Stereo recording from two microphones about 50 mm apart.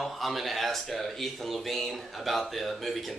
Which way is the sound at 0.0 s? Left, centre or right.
Centre.